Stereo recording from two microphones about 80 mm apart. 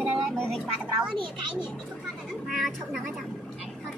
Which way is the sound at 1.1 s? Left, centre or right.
Right.